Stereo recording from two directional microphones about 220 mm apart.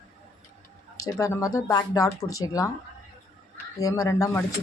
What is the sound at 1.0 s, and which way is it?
Speech, 15° left (ahead or behind).